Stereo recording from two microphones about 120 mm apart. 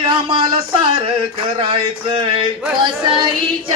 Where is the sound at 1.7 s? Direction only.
45° right (ahead or behind).